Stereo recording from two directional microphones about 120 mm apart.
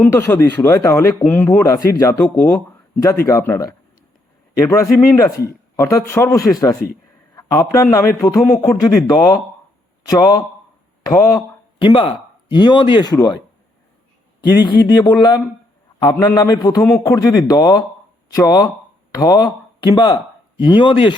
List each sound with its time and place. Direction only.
0.0 s a man's voice: 20° left (ahead or behind)
11.8 s speech: 45° left (ahead or behind)
14.5 s a man's voice: 35° left (ahead or behind)
20.7 s speech: 45° left (ahead or behind)